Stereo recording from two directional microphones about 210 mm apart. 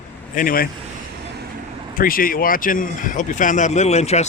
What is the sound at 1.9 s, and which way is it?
A man's voice, 45° left (ahead or behind).